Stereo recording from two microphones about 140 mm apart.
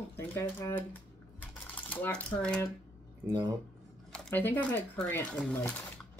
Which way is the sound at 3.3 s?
30° right (ahead or behind).